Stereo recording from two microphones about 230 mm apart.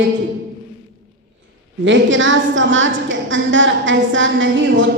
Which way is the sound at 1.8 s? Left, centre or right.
Right.